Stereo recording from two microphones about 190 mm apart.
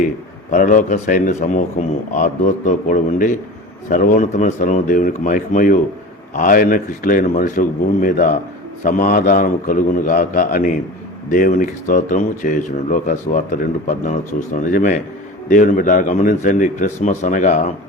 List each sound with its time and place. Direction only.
0.5 s speech: 40° left (ahead or behind)